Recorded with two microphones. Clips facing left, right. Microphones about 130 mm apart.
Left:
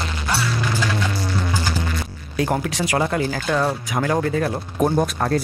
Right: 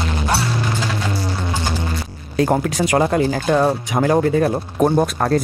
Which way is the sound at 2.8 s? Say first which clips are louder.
Right 5 dB; 30° right (ahead or behind).